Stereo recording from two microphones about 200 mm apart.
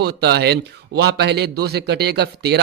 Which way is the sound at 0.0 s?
55° right (ahead or behind).